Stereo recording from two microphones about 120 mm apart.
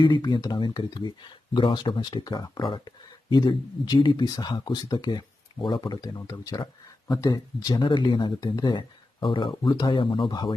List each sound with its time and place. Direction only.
0.0 s speech: 40° left (ahead or behind)